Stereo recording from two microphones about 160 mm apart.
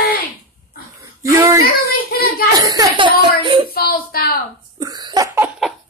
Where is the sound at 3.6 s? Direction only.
70° left (ahead or behind).